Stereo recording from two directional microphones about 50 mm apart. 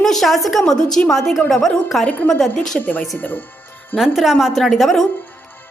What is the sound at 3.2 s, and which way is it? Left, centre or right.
Speech, left.